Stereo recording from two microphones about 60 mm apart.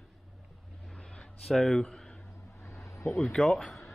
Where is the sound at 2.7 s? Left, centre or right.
Left.